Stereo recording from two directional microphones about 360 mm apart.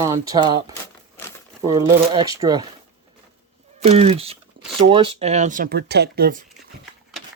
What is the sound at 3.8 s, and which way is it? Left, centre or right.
Speech, centre.